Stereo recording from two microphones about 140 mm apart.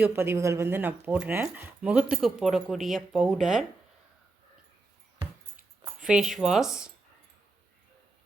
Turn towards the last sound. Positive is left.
turn(degrees=-5)  # may be behind; listen again after turning